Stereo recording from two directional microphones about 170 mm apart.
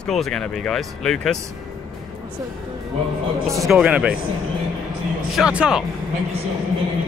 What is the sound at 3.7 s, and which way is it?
Speech, 5° right (ahead or behind).